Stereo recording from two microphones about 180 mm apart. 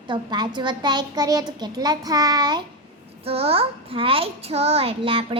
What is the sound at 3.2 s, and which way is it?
A child's voice, 35° right (ahead or behind).